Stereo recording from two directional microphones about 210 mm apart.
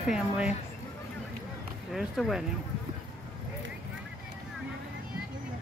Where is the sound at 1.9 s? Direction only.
Centre (ahead or behind).